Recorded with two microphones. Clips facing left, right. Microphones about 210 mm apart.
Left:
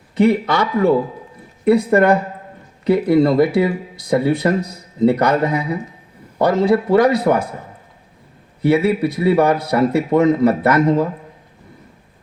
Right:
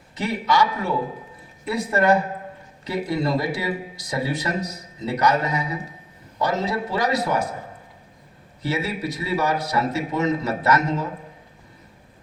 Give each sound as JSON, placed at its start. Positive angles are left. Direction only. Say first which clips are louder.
{"t": 0.2, "sound": "speech", "louder": "left 7 dB", "side_deg": 55}
{"t": 8.6, "sound": "speech", "louder": "left 11 dB", "side_deg": 55}